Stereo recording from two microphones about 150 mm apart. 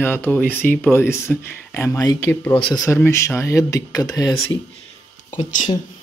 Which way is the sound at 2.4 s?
10° left (ahead or behind).